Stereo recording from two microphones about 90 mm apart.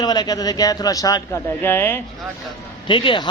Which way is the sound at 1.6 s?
25° left (ahead or behind).